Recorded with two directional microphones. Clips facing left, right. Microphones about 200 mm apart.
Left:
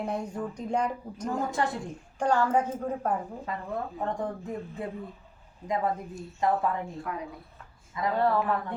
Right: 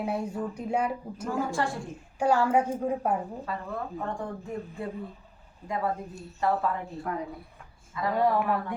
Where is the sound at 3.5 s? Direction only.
20° left (ahead or behind).